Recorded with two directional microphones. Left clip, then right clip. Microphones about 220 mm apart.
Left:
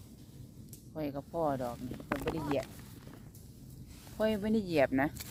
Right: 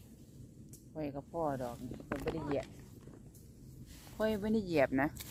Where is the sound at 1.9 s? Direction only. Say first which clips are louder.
Left 3 dB; 30° left (ahead or behind).